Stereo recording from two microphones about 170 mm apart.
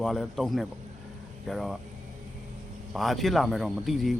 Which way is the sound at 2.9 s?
Centre (ahead or behind).